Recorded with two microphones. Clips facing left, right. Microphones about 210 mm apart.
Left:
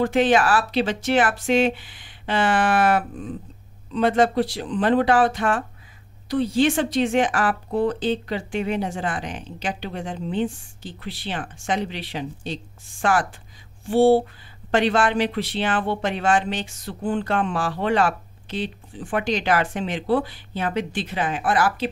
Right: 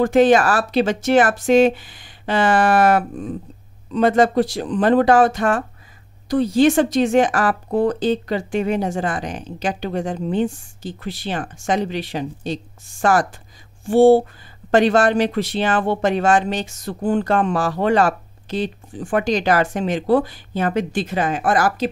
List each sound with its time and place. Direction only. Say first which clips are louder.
0.0 s speech: right 5 dB; 45° right (ahead or behind)